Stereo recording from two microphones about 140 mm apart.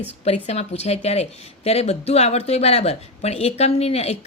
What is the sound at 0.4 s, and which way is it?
A woman's voice, 50° left (ahead or behind).